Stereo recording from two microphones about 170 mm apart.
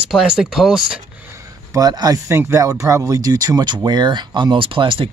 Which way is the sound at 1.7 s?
20° right (ahead or behind).